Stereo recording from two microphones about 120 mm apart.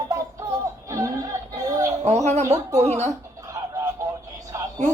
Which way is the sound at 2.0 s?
70° right (ahead or behind).